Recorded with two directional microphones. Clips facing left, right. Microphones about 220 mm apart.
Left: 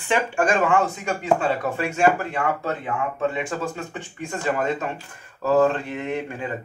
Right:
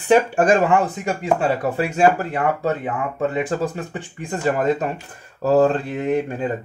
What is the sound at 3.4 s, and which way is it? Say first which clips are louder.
Speech: right 6 dB; 35° right (ahead or behind).